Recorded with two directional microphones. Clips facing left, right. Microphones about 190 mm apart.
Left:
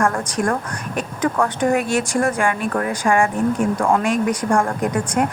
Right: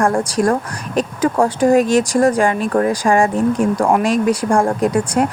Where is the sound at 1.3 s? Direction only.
30° right (ahead or behind).